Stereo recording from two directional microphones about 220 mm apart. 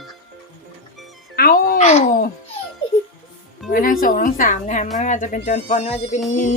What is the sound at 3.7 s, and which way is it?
Speech, 40° left (ahead or behind).